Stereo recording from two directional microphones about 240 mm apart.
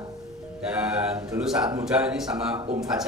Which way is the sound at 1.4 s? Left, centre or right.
Centre.